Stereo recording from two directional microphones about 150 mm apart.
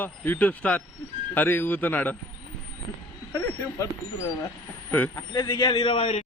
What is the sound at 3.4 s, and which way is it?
Speech, 15° left (ahead or behind).